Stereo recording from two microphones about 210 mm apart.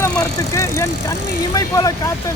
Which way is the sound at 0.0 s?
15° left (ahead or behind).